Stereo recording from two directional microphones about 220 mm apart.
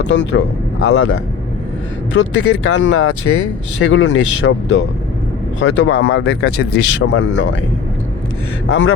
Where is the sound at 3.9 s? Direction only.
60° left (ahead or behind).